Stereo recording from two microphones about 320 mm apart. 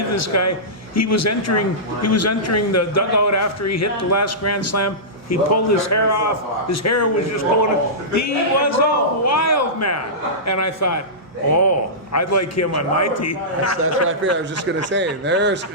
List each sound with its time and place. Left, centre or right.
0.1 s a man's voice: left
12.1 s a man's voice: left
14.3 s speech: right